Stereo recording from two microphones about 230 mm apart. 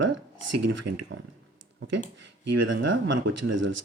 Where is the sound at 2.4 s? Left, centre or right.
Right.